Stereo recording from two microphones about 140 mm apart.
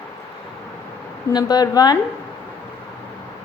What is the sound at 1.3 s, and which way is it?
Speech, 30° left (ahead or behind).